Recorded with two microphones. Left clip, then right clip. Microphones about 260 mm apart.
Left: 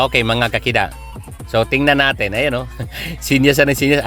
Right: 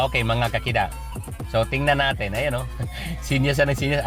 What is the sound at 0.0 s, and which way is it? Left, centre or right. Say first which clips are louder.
Speech: left 7 dB; left.